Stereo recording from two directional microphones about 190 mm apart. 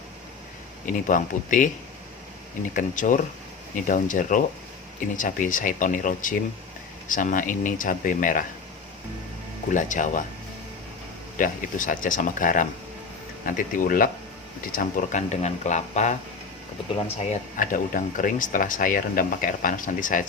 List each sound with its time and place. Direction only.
0.9 s speech: 45° left (ahead or behind)
2.7 s speech: 40° left (ahead or behind)
9.7 s speech: 40° left (ahead or behind)
11.3 s speech: 45° left (ahead or behind)
17.2 s speech: 45° left (ahead or behind)